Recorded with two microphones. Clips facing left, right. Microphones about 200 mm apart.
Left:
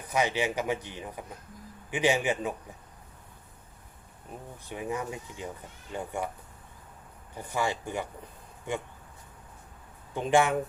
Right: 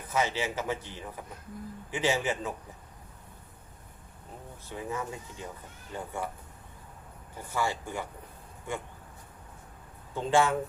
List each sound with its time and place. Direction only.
0.1 s a man's voice: 15° left (ahead or behind)
4.6 s a man's voice: 15° left (ahead or behind)
7.3 s a man's voice: 15° left (ahead or behind)
10.2 s a man's voice: 15° left (ahead or behind)